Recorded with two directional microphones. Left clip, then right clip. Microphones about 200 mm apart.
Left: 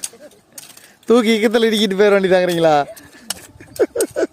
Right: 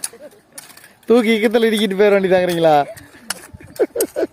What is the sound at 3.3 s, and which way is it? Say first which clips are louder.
Bird: right 1 dB; 10° left (ahead or behind).